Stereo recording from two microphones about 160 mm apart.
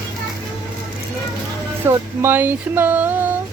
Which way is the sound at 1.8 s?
15° right (ahead or behind).